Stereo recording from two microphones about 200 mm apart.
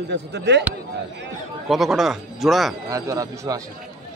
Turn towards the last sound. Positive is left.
turn(degrees=-20)  # may be behind; listen again after turning